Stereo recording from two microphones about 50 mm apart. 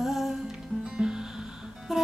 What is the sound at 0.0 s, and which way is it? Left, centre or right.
Music, centre.